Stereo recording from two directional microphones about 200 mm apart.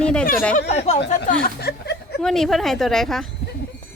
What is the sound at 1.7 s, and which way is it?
Speech, 55° left (ahead or behind).